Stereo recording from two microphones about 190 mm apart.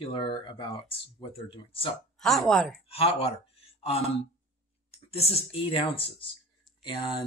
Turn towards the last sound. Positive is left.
turn(degrees=25)  # may be behind; listen again after turning